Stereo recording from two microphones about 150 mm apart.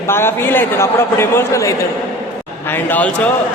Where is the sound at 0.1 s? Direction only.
15° left (ahead or behind).